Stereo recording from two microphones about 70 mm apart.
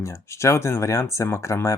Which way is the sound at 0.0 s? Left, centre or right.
Left.